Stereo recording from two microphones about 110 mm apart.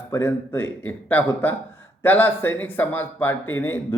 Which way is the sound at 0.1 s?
20° left (ahead or behind).